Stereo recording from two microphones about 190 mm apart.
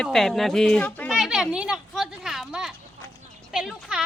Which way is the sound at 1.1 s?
Centre (ahead or behind).